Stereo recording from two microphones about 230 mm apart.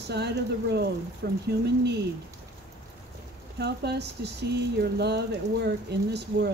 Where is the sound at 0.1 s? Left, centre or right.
Right.